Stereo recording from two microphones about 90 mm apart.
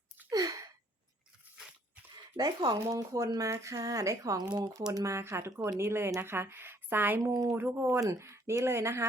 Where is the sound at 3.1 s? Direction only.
40° right (ahead or behind).